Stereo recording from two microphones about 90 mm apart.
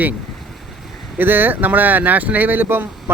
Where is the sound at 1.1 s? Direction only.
20° right (ahead or behind).